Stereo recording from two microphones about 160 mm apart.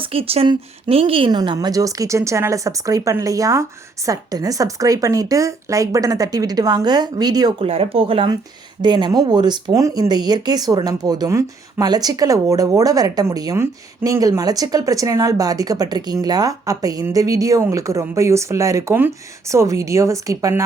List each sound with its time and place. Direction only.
0.0 s speech: 35° right (ahead or behind)
7.7 s speech: 35° right (ahead or behind); by 20.6 s 20° right (ahead or behind)